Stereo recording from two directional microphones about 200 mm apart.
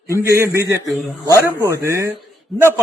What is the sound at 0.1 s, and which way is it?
A man's voice, 15° right (ahead or behind).